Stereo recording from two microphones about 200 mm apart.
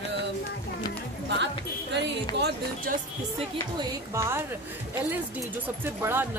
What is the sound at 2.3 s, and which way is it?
Speech, 50° right (ahead or behind).